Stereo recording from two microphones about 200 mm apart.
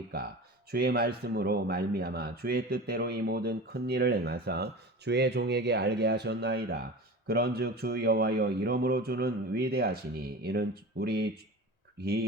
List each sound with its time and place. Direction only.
0.7 s speech: 50° right (ahead or behind)